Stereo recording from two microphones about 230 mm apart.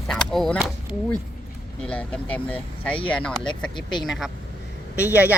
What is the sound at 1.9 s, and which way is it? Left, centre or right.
A woman's voice, centre.